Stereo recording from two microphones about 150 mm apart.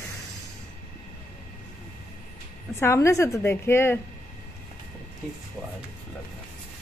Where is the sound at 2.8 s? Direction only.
20° left (ahead or behind).